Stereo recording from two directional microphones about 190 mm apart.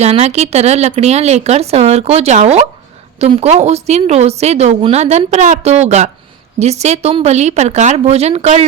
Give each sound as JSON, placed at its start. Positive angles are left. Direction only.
{"t": 0.0, "sound": "a woman's voice", "side_deg": -35}